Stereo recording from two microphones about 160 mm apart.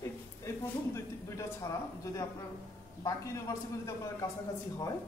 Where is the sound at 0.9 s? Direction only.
20° left (ahead or behind).